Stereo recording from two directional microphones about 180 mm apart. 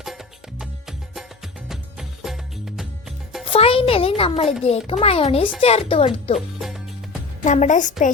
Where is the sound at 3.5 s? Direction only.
30° left (ahead or behind).